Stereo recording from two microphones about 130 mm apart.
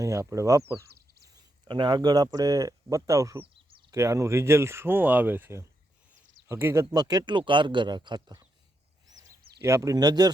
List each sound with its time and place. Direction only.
0.0 s speech: 25° right (ahead or behind)
1.6 s speech: 35° right (ahead or behind); by 6.8 s 20° right (ahead or behind)
6.9 s speech: 30° right (ahead or behind)
9.6 s speech: 25° right (ahead or behind)